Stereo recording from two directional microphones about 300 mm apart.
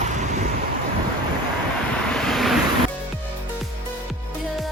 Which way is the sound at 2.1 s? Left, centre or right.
Centre.